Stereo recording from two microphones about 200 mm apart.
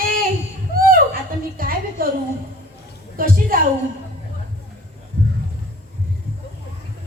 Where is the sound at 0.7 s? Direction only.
45° right (ahead or behind).